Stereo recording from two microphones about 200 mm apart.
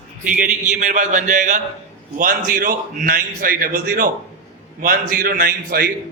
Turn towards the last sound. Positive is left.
turn(degrees=-45)  # may be behind; listen again after turning